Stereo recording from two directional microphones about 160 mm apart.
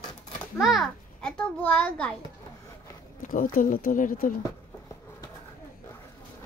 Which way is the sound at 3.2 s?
55° left (ahead or behind).